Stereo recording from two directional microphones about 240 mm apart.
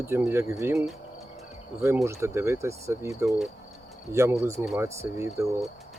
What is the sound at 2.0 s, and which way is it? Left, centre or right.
Speech, centre.